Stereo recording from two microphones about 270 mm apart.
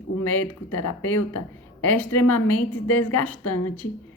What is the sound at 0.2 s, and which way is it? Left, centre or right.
Speech, left.